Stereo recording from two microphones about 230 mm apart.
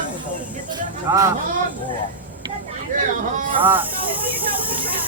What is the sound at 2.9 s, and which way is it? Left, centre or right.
Speech, right.